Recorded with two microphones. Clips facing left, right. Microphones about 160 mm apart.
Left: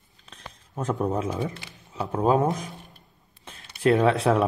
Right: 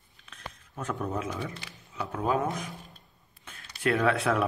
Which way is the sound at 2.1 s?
35° left (ahead or behind).